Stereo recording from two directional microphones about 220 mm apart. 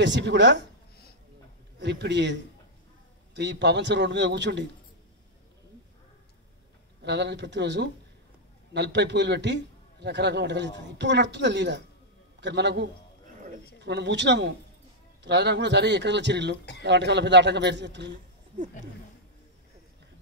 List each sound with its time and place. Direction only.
0.0 s a man's voice: 50° right (ahead or behind)
1.8 s a man's voice: 50° right (ahead or behind)
7.0 s a man's voice: 50° right (ahead or behind)